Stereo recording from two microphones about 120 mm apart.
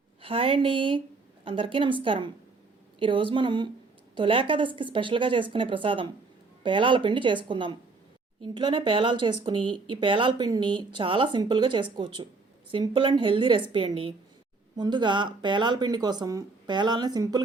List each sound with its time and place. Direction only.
0.2 s a woman's voice: 50° right (ahead or behind)
14.8 s speech: 40° right (ahead or behind)